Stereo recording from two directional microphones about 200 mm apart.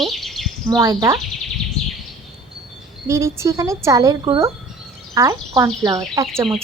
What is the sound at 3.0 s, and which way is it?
Speech, 15° right (ahead or behind).